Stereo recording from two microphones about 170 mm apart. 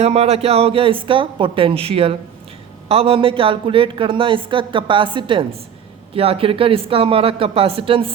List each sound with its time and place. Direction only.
0.0 s a woman's voice: 35° right (ahead or behind)